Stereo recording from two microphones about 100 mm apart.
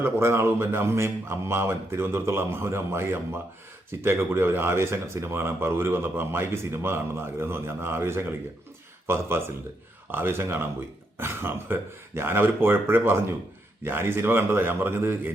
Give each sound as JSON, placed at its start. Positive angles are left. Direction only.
{"t": 0.0, "sound": "speech", "side_deg": -25}